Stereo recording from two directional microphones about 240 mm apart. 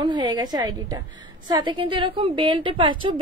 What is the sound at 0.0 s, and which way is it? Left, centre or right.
A woman's voice, centre.